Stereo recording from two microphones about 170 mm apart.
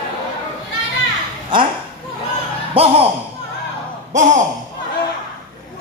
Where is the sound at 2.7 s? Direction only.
35° right (ahead or behind).